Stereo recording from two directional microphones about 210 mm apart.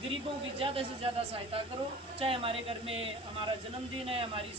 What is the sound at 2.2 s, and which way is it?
Speech, 25° right (ahead or behind).